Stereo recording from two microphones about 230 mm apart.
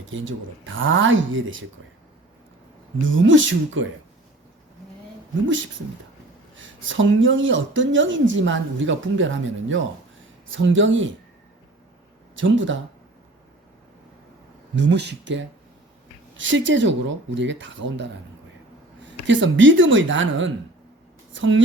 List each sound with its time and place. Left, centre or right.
0.1 s a woman's voice: right
3.1 s a woman's voice: right
6.6 s a woman's voice: right
12.4 s a woman's voice: right
14.8 s a woman's voice: right